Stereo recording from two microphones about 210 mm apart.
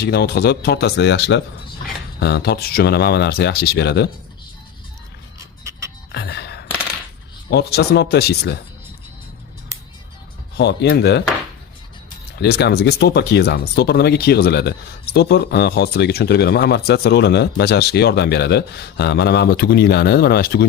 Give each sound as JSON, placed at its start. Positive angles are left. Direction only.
{"t": 0.0, "sound": "speech", "side_deg": 50}
{"t": 6.1, "sound": "gasp", "side_deg": 50}
{"t": 7.5, "sound": "speech", "side_deg": 50}
{"t": 10.6, "sound": "speech", "side_deg": 55}
{"t": 12.4, "sound": "speech", "side_deg": 55}